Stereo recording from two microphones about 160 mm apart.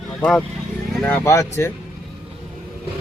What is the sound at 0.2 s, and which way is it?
Speech, 5° left (ahead or behind).